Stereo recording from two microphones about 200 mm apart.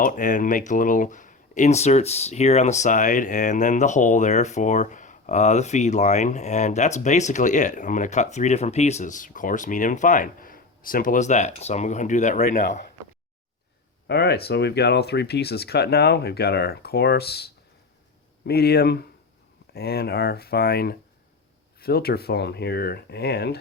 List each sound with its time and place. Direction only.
0.0 s speech: 40° left (ahead or behind)
14.1 s speech: 55° left (ahead or behind)